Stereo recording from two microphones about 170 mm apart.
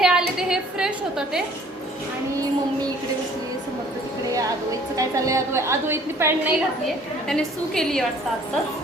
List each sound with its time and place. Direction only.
0.0 s a woman's voice: 5° right (ahead or behind)
4.9 s a woman's voice: 20° right (ahead or behind)
7.3 s a woman's voice: 5° left (ahead or behind)